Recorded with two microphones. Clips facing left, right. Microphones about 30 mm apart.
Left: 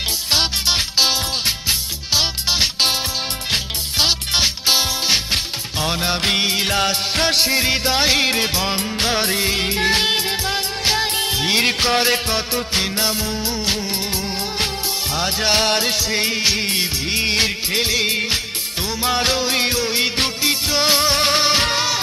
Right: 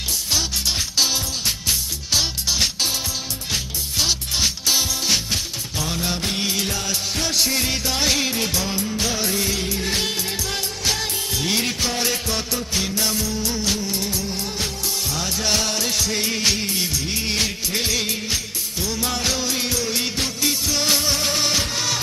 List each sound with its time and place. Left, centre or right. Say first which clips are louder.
0.3 s music: left 5 dB; left
3.5 s music: left 3 dB; left
4.4 s music: left 2 dB; left
6.7 s music of bollywood: left 6 dB; left
7.4 s music: left 5 dB; left
8.6 s music of bollywood: left 3 dB; left
10.8 s music: left 5 dB; left
11.6 s music: left 6 dB; left
15.1 s music: left 5 dB; left
16.6 s music of bollywood: left 3 dB; left
17.2 s music of bollywood: left 5 dB; left
18.0 s music: left 5 dB; left
21.0 s music: left 5 dB; left